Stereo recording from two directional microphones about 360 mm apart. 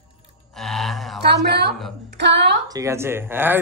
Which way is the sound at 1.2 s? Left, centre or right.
Right.